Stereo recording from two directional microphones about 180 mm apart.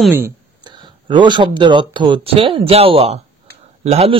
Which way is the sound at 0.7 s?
25° right (ahead or behind).